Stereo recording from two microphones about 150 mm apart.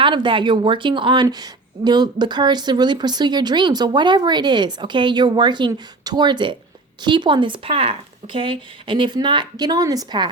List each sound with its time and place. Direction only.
0.0 s a woman's voice: 35° right (ahead or behind)